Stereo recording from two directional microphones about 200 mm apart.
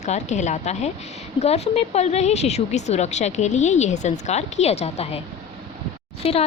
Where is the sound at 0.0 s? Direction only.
35° left (ahead or behind).